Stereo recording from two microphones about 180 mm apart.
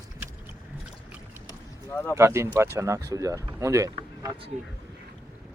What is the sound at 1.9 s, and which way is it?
Speech, 10° left (ahead or behind).